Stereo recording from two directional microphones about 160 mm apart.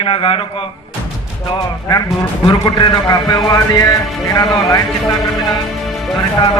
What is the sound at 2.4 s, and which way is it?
A man's voice, 25° left (ahead or behind).